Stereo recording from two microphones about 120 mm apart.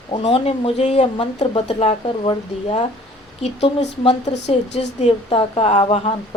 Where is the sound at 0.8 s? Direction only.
70° left (ahead or behind).